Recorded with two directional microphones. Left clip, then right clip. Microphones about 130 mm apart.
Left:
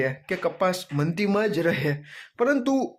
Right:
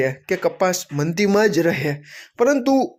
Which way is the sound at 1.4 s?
40° right (ahead or behind).